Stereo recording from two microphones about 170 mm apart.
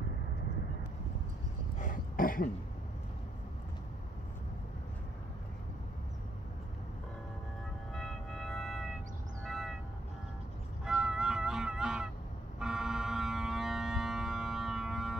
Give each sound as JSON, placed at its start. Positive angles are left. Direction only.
{"t": 1.8, "sound": "throat clearing", "side_deg": 50}
{"t": 7.9, "sound": "music", "side_deg": 0}
{"t": 9.4, "sound": "train", "side_deg": 0}
{"t": 10.9, "sound": "music", "side_deg": 0}
{"t": 12.5, "sound": "a sound", "side_deg": -5}